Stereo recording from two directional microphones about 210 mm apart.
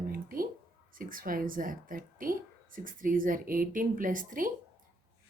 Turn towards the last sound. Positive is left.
turn(degrees=-40)  # may be behind; listen again after turning